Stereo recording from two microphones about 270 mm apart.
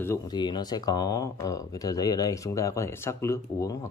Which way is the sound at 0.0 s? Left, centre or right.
Centre.